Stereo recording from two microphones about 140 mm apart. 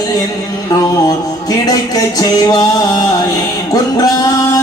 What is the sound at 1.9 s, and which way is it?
Music, 25° left (ahead or behind).